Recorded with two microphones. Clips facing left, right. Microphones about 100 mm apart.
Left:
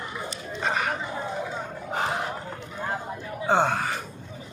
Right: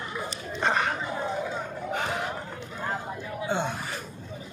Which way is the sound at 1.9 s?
35° left (ahead or behind).